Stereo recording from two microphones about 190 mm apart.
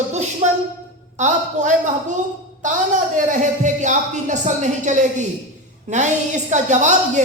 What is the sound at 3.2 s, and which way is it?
A woman's voice, 40° right (ahead or behind).